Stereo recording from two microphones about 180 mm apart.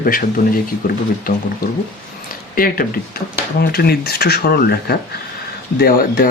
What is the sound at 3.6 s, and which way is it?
Speech, 60° left (ahead or behind).